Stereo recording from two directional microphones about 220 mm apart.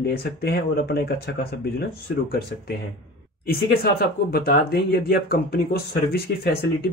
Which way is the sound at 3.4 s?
45° left (ahead or behind).